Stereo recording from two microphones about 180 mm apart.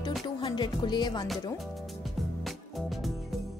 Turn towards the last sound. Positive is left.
turn(degrees=0)  # may be behind; listen again after turning